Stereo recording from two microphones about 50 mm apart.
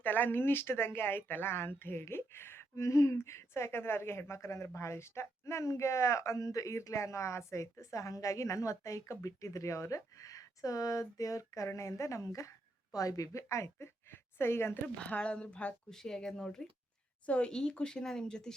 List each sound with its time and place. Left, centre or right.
0.0 s speech: left
14.9 s speech: left
15.9 s speech: centre
17.2 s a woman's voice: left